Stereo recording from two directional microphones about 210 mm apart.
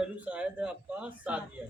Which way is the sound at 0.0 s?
5° right (ahead or behind).